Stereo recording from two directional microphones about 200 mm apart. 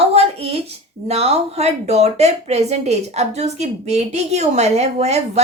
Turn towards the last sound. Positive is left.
turn(degrees=-35)  # may be behind; listen again after turning